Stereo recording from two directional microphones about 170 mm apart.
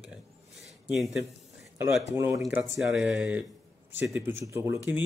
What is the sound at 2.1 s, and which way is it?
Speech, 20° right (ahead or behind).